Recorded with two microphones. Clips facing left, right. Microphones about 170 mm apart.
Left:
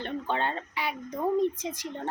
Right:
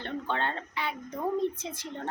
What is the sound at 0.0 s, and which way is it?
Speech, 15° left (ahead or behind).